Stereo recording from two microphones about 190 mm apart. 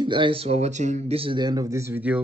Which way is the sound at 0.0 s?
25° right (ahead or behind).